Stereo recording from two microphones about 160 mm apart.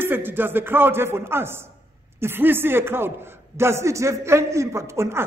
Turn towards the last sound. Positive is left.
turn(degrees=-15)  # may be behind; listen again after turning